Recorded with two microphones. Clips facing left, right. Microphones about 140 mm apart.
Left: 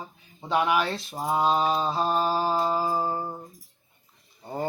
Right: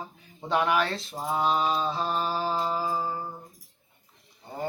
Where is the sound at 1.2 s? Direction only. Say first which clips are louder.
Left 3 dB; 20° left (ahead or behind).